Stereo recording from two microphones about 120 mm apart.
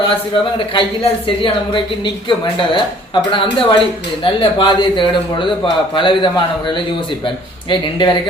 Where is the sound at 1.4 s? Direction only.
45° left (ahead or behind).